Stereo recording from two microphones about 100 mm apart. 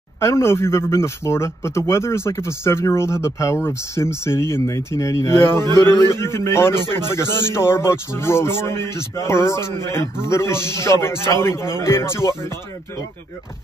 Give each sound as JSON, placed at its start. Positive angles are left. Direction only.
{"t": 0.2, "sound": "a man's voice", "side_deg": 25}